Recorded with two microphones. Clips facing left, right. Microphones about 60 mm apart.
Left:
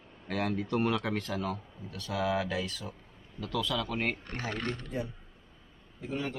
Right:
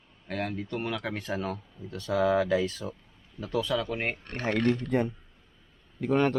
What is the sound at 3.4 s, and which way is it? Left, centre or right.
Speech, centre.